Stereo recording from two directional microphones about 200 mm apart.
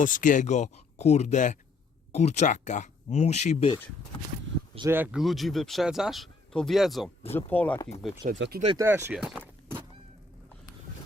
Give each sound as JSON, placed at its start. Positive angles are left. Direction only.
{"t": 0.0, "sound": "speech", "side_deg": 40}
{"t": 4.9, "sound": "speech", "side_deg": -5}
{"t": 8.4, "sound": "speech", "side_deg": -55}
{"t": 8.6, "sound": "speech", "side_deg": -20}